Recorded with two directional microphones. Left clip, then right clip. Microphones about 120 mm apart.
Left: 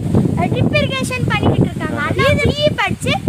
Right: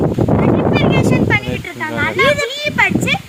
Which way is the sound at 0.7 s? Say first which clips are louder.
Right 3 dB; 35° left (ahead or behind).